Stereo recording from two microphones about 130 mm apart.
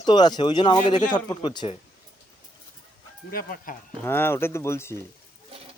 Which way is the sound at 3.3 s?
90° left.